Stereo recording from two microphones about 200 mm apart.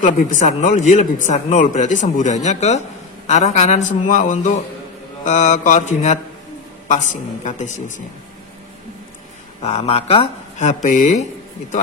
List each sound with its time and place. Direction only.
0.0 s speech: 40° left (ahead or behind)
9.6 s speech: 30° left (ahead or behind)